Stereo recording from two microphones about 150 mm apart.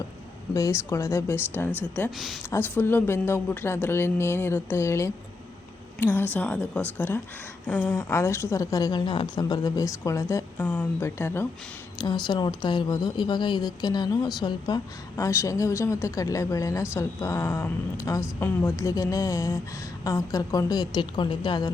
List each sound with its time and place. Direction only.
0.5 s speech: 20° left (ahead or behind)
2.0 s a woman's voice: centre (ahead or behind)
2.5 s a woman's voice: 15° left (ahead or behind)
11.9 s a woman's voice: 30° left (ahead or behind)